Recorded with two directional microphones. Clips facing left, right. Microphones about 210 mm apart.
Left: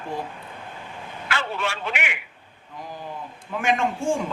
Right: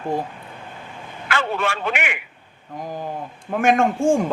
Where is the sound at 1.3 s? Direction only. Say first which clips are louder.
Right 5 dB; 50° right (ahead or behind).